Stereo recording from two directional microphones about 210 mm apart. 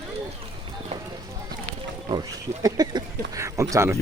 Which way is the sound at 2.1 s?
20° right (ahead or behind).